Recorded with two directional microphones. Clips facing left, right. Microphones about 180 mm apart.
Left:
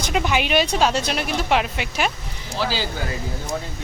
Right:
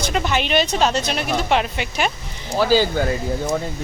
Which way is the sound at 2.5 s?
50° right (ahead or behind).